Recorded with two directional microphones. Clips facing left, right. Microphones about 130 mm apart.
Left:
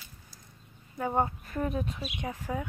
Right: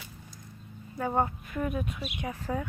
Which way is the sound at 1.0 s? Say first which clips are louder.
Even; 20° left (ahead or behind).